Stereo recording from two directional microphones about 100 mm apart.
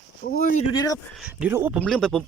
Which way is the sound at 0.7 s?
35° left (ahead or behind).